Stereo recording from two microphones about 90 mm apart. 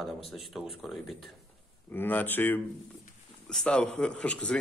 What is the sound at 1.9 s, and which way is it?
Speech, 20° left (ahead or behind).